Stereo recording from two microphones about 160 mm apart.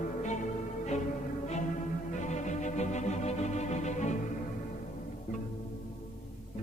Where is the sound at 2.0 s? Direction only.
50° left (ahead or behind).